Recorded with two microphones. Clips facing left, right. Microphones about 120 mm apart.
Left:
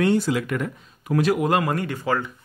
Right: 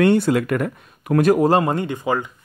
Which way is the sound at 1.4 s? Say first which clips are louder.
Right 5 dB; 30° right (ahead or behind).